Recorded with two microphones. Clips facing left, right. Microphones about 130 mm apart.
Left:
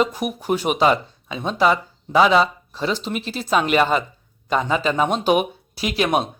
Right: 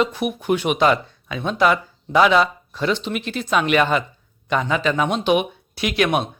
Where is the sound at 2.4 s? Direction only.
30° left (ahead or behind).